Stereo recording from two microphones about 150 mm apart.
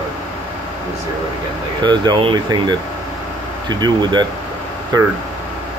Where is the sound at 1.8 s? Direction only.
30° right (ahead or behind).